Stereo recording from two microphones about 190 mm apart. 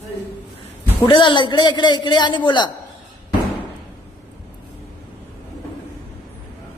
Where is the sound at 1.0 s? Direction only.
25° left (ahead or behind).